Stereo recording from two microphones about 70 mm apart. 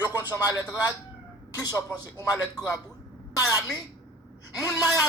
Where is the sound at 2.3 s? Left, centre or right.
Left.